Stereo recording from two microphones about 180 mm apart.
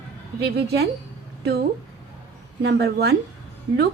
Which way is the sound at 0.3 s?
65° right (ahead or behind).